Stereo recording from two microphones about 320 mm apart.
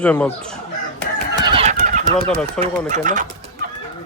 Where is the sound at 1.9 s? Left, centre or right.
Right.